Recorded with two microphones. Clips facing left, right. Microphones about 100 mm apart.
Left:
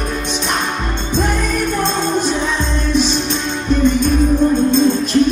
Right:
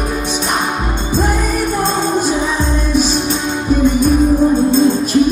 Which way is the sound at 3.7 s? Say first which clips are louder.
Right 1 dB; 10° right (ahead or behind).